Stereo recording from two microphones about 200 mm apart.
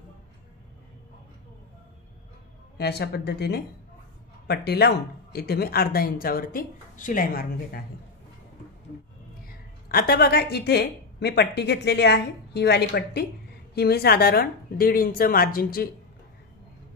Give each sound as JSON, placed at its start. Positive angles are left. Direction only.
{"t": 2.8, "sound": "speech", "side_deg": 55}
{"t": 9.8, "sound": "speech", "side_deg": 50}